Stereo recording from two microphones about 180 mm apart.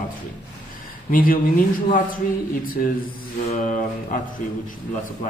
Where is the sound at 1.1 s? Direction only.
50° left (ahead or behind).